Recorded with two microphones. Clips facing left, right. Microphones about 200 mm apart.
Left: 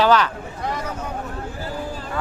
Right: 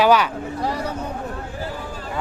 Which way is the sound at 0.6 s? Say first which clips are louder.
Right 2 dB; 35° right (ahead or behind).